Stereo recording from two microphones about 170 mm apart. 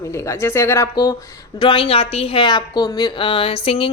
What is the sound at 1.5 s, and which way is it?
A woman's voice, 30° left (ahead or behind).